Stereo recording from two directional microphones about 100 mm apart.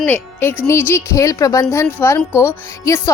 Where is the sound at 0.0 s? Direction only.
20° left (ahead or behind).